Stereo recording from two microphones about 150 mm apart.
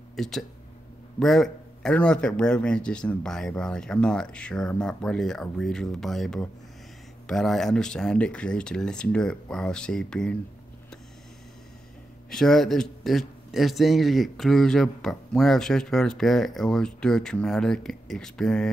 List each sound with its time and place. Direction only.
0.1 s a man's voice: centre (ahead or behind)
12.3 s a man's voice: 5° left (ahead or behind)